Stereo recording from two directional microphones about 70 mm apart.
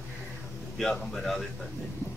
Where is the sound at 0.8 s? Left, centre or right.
Centre.